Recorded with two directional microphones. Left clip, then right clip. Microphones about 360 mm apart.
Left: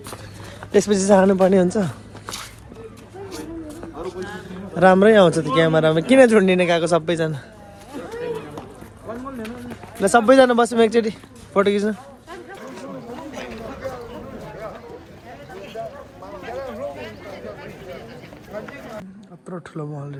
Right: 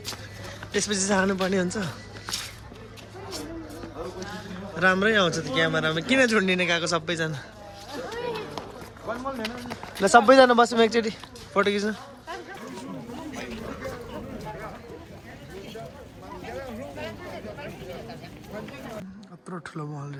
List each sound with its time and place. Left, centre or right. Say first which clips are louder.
0.7 s speech: left 10 dB; centre
4.8 s speech: left 9 dB; centre
10.0 s a man's voice: left 2 dB; centre
13.1 s chatter: left 4 dB; centre
16.4 s a sound: left 8 dB; centre